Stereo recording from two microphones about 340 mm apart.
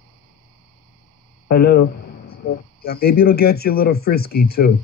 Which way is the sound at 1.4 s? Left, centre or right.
Left.